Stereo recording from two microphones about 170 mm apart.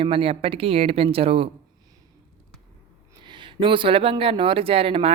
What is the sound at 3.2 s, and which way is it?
Speech, 25° right (ahead or behind).